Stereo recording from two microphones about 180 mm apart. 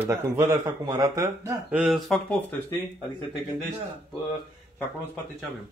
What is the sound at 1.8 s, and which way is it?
Speech, centre (ahead or behind).